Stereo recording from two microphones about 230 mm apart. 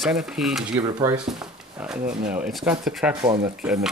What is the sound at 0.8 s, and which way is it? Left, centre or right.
Speech, centre.